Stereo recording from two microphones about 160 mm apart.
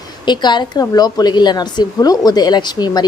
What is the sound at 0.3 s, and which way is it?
Speech, 30° left (ahead or behind).